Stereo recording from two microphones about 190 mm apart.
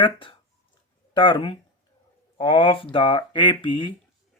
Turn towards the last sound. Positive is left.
turn(degrees=25)  # may be behind; listen again after turning